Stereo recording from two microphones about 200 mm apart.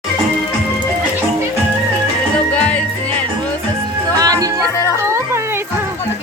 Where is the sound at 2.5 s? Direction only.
5° left (ahead or behind).